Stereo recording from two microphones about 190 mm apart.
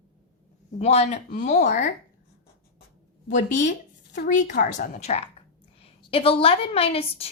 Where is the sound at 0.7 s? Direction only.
35° left (ahead or behind).